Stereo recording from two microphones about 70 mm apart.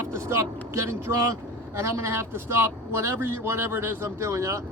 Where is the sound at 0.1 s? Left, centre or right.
Right.